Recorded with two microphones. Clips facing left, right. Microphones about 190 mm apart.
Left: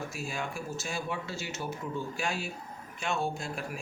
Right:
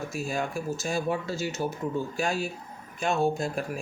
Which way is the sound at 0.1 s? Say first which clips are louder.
Right 6 dB; 40° right (ahead or behind).